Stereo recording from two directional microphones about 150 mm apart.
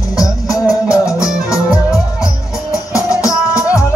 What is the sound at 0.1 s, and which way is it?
Music, 25° left (ahead or behind).